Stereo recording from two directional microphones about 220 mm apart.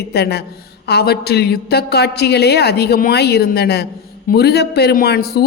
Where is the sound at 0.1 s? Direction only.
45° left (ahead or behind).